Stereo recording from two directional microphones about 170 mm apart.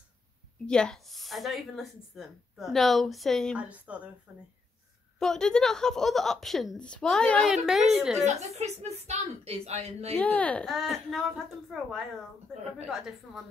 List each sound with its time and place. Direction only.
0.7 s a woman's voice: 5° left (ahead or behind)
5.2 s a woman's voice: 5° left (ahead or behind)
8.2 s a woman's voice: 40° right (ahead or behind)
10.1 s a woman's voice: 10° left (ahead or behind)